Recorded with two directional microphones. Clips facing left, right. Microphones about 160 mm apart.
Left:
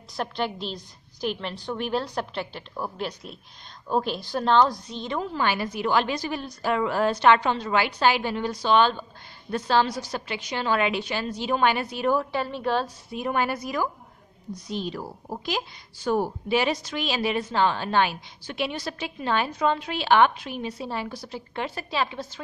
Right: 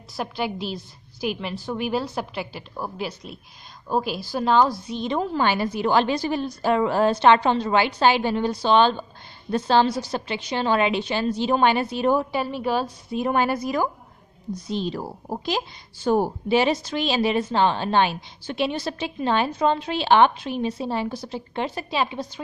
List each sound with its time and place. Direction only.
0.1 s a woman's voice: 5° right (ahead or behind)
5.3 s speech: 30° right (ahead or behind); by 12.9 s 10° right (ahead or behind)
13.1 s speech: 30° right (ahead or behind)